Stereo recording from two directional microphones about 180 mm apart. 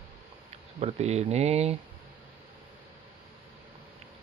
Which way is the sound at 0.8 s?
35° right (ahead or behind).